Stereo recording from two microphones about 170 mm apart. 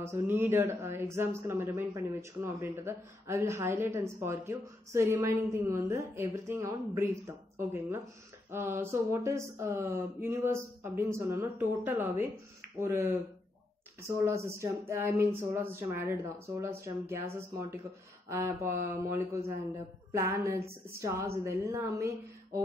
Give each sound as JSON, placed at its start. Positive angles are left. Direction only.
{"t": 0.0, "sound": "speech", "side_deg": -15}
{"t": 14.2, "sound": "speech", "side_deg": -15}